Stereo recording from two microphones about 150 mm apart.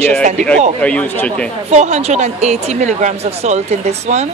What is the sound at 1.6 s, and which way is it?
A woman's voice, 50° right (ahead or behind).